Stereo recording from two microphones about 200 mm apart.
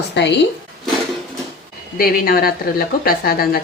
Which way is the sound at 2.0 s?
50° left (ahead or behind).